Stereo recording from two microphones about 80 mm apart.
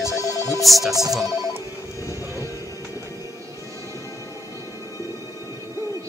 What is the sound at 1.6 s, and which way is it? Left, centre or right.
Music, left.